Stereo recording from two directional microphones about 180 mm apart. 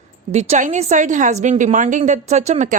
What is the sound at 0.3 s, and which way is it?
A woman's voice, 35° right (ahead or behind).